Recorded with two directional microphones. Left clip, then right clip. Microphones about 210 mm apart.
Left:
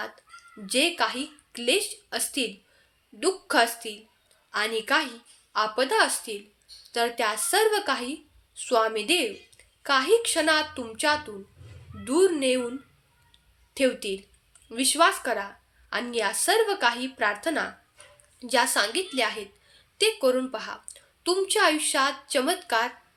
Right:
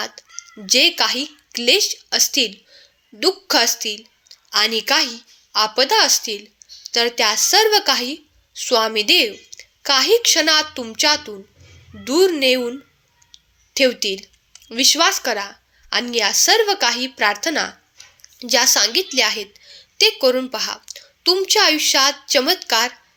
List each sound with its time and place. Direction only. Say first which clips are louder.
0.0 s a woman's voice: right 8 dB; 30° right (ahead or behind)
13.7 s a woman's voice: right 8 dB; 30° right (ahead or behind)